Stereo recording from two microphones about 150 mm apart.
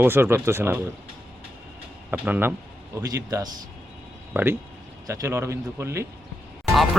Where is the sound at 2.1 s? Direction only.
10° right (ahead or behind).